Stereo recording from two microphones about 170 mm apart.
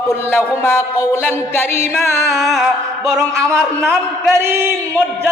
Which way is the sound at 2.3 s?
Centre (ahead or behind).